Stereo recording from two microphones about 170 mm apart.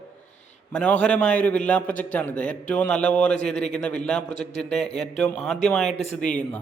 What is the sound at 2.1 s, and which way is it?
A man's voice, 5° left (ahead or behind).